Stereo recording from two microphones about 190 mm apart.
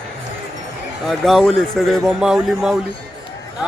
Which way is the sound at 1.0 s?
Centre (ahead or behind).